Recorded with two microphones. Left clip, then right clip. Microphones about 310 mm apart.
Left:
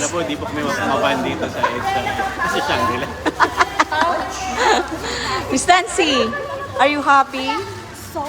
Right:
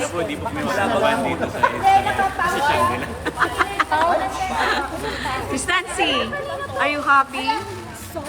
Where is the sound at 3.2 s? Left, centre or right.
Centre.